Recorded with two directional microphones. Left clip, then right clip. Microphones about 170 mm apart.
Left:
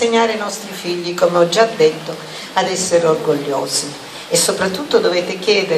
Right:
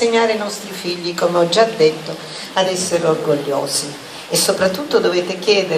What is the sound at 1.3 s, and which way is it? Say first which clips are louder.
Speech: right 1 dB; 15° right (ahead or behind).